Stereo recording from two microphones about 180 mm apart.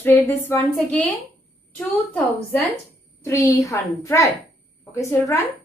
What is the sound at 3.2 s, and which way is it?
A woman's voice, 15° left (ahead or behind).